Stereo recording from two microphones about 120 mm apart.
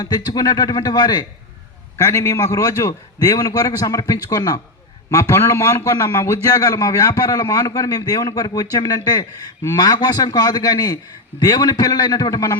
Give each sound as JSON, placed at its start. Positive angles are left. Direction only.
{"t": 0.0, "sound": "a man's voice", "side_deg": 35}